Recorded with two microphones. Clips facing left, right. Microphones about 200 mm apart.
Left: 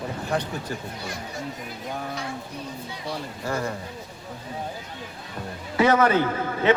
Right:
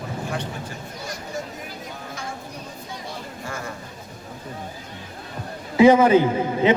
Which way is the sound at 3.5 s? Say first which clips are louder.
Left 6 dB; 40° left (ahead or behind).